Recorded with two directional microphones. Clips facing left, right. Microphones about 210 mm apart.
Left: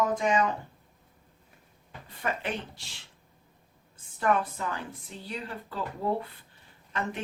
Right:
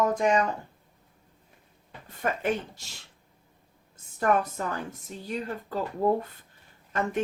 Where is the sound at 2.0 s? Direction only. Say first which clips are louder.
Right 5 dB; 45° right (ahead or behind).